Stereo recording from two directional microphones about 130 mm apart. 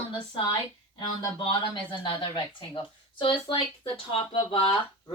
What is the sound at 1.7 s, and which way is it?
Speech, 35° left (ahead or behind).